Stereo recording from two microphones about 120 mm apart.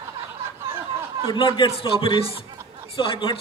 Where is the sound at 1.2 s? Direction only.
40° left (ahead or behind).